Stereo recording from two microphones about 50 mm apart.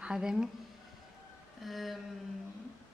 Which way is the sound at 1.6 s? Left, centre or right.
Centre.